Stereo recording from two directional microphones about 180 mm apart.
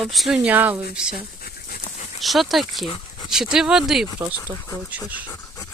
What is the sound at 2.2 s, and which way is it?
Speech, centre (ahead or behind).